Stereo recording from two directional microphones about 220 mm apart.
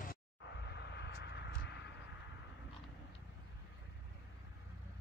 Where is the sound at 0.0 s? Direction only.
45° left (ahead or behind).